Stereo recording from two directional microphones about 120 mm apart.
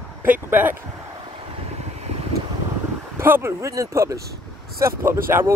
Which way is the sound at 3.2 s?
20° right (ahead or behind).